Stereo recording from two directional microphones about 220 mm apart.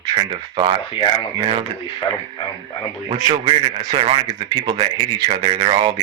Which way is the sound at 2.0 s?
15° left (ahead or behind).